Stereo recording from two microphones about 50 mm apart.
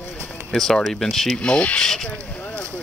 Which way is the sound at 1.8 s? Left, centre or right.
Centre.